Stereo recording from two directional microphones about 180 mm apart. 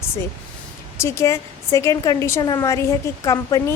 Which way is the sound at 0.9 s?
15° left (ahead or behind).